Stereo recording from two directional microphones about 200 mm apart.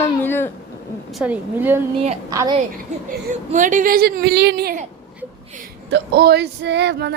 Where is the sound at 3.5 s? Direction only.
40° right (ahead or behind).